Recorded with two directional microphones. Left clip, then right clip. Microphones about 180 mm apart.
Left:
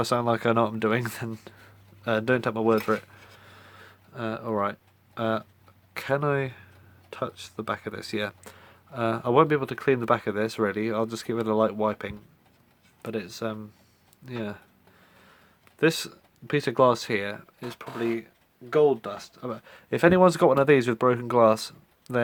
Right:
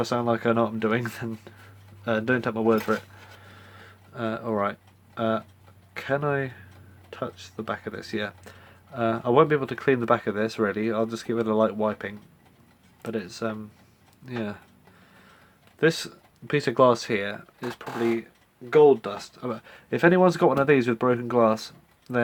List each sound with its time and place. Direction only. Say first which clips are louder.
0.0 s speech: even; 40° left (ahead or behind)
3.4 s a sound: right 1 dB; 35° left (ahead or behind)
5.9 s speech: even; 40° left (ahead or behind)
15.8 s speech: right 1 dB; 35° left (ahead or behind)